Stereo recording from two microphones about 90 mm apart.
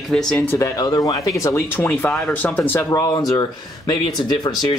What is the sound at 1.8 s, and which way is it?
Speech, 20° left (ahead or behind).